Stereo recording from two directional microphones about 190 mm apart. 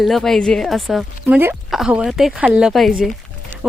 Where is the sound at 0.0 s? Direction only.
Centre (ahead or behind).